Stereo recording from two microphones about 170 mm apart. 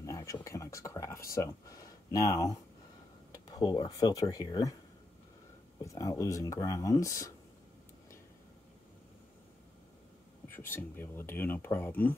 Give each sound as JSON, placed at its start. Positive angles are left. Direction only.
{"t": 0.0, "sound": "speech", "side_deg": 20}
{"t": 5.8, "sound": "speech", "side_deg": 20}
{"t": 10.5, "sound": "speech", "side_deg": 10}